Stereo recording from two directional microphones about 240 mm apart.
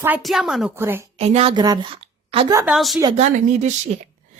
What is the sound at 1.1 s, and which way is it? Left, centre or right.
A woman's voice, right.